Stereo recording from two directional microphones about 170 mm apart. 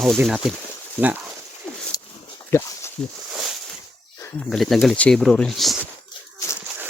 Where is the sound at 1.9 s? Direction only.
20° left (ahead or behind).